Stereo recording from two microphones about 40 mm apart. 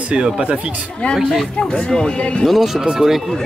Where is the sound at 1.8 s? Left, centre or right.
Left.